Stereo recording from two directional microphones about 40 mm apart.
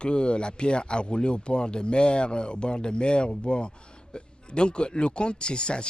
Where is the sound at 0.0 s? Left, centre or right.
Left.